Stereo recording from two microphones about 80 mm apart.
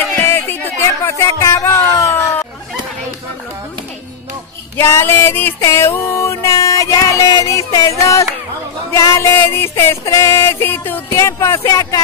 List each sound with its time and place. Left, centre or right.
0.1 s music: left
1.1 s speech: left
4.7 s female singing: left
5.6 s a sound: left
6.5 s speech: left
8.0 s music: left
11.1 s music: left